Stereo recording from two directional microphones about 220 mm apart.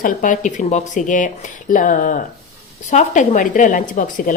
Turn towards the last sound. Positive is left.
turn(degrees=35)  # may be behind; listen again after turning